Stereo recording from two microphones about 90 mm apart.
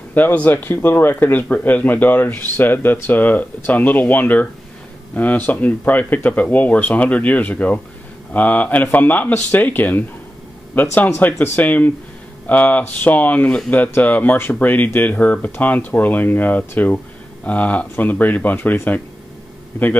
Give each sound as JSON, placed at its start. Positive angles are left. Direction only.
{"t": 0.1, "sound": "speech", "side_deg": 20}